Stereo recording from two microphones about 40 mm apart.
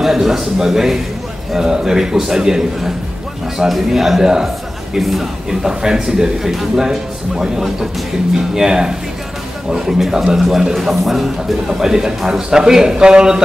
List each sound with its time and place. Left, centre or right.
0.0 s a man's voice: centre